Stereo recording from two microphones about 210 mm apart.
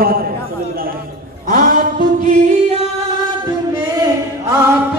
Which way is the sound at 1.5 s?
40° right (ahead or behind).